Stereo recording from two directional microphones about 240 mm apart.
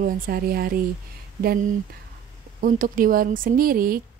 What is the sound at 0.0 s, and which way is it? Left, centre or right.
Speech, right.